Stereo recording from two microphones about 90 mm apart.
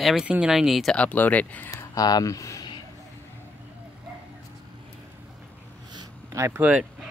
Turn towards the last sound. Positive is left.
turn(degrees=-20)  # may be behind; listen again after turning